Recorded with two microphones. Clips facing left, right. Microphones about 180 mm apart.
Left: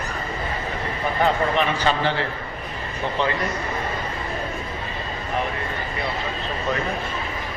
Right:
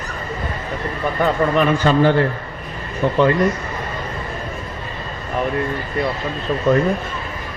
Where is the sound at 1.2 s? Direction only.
45° right (ahead or behind).